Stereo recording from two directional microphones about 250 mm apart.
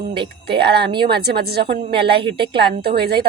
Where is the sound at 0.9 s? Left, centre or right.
Centre.